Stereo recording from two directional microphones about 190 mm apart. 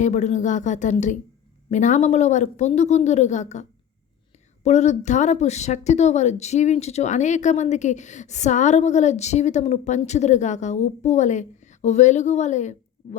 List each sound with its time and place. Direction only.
0.0 s speech: 40° left (ahead or behind)